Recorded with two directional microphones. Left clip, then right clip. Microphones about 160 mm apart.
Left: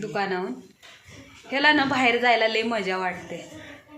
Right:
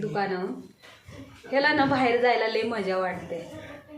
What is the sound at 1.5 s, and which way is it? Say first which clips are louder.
A woman's voice: left 2 dB; 30° left (ahead or behind).